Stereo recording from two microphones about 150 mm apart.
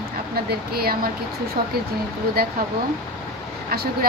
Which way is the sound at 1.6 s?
65° right (ahead or behind).